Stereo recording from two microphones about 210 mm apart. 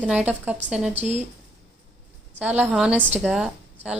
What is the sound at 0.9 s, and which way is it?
Speech, 30° right (ahead or behind).